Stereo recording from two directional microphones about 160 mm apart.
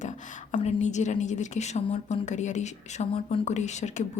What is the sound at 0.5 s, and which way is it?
A woman's voice, 45° left (ahead or behind).